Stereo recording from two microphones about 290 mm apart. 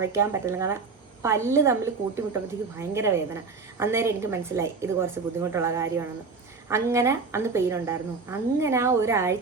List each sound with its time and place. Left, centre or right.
0.0 s a woman's voice: centre